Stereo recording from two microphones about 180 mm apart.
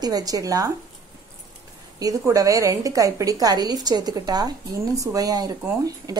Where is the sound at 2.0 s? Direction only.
20° right (ahead or behind).